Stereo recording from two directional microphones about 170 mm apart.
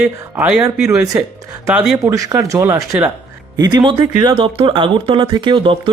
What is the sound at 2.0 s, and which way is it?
Speech, 20° right (ahead or behind).